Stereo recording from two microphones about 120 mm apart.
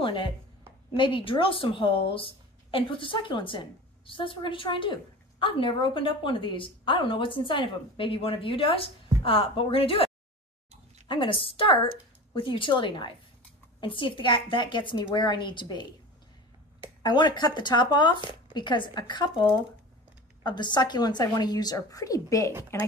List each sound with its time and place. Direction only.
0.0 s speech: 45° left (ahead or behind)
11.1 s speech: 45° left (ahead or behind)
17.0 s a woman's voice: 35° left (ahead or behind)
20.4 s a woman's voice: 40° left (ahead or behind)